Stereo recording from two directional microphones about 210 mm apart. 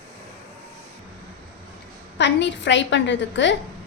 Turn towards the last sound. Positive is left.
turn(degrees=60)  # may be behind; listen again after turning